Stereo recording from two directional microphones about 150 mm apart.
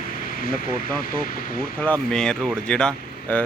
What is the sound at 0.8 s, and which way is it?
Speech, 75° left (ahead or behind).